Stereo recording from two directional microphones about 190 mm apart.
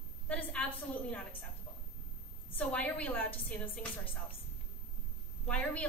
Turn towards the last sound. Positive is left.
turn(degrees=5)  # may be behind; listen again after turning